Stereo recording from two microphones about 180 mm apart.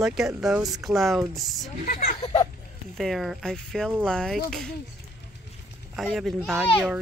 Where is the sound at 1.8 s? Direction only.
45° left (ahead or behind).